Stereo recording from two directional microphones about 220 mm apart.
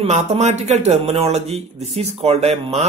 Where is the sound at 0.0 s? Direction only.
30° right (ahead or behind).